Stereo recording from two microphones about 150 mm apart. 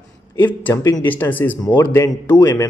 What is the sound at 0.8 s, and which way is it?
Speech, 25° left (ahead or behind).